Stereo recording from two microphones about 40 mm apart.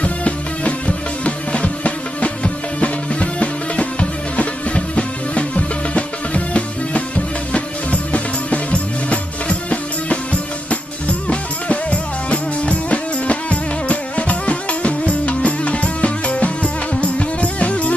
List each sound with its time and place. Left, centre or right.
0.0 s music: left